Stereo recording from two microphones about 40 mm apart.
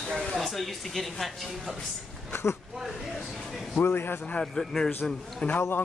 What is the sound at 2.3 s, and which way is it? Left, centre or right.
Speech, left.